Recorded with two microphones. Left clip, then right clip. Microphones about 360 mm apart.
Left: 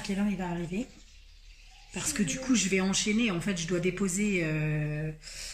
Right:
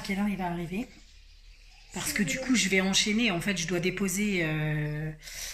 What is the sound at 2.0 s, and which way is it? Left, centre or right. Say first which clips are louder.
Speech: right 3 dB; centre.